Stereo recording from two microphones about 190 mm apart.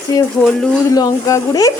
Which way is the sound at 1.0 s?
20° left (ahead or behind).